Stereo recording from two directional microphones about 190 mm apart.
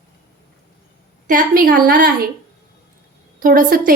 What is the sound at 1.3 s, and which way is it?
Speech, 45° right (ahead or behind).